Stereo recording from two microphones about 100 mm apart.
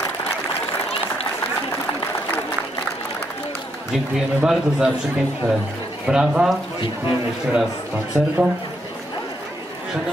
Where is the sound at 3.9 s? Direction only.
5° right (ahead or behind).